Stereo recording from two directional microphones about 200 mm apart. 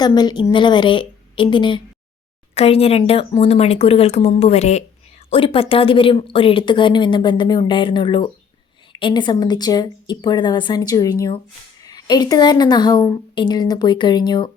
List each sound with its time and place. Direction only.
0.0 s a woman's voice: 20° left (ahead or behind)